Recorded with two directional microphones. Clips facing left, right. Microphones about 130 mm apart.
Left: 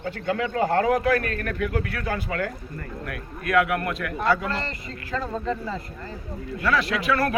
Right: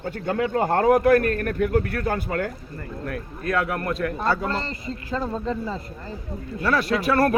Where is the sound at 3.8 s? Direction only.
35° right (ahead or behind).